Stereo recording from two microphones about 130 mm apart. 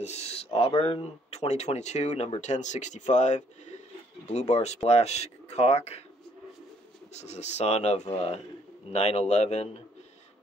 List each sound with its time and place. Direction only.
0.0 s speech: 55° left (ahead or behind)
7.2 s speech: 60° left (ahead or behind)